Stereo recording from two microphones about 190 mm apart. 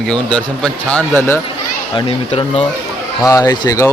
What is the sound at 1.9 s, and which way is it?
Speech, 30° left (ahead or behind).